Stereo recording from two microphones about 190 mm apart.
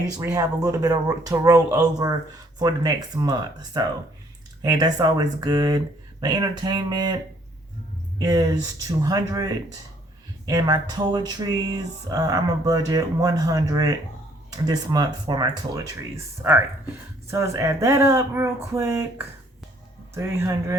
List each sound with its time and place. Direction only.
0.2 s speech: 15° right (ahead or behind)
8.2 s speech: 20° right (ahead or behind)